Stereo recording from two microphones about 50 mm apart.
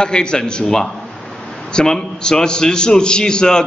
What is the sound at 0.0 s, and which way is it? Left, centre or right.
A man's voice, centre.